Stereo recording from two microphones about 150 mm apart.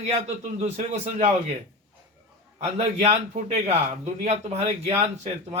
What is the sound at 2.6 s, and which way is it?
A man's voice, 45° right (ahead or behind).